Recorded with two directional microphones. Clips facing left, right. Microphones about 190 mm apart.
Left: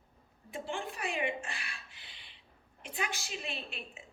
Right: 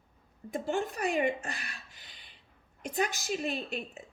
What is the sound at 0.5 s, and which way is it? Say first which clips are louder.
Speech: right 7 dB; 40° right (ahead or behind).